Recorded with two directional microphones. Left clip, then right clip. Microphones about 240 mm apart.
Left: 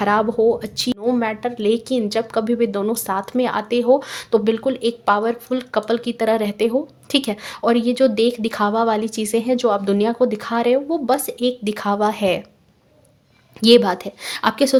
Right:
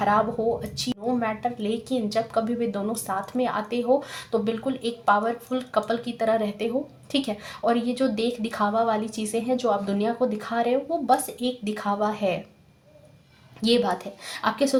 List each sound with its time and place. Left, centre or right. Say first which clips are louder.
0.0 s speech: left 6 dB; left
13.6 s speech: left 9 dB; left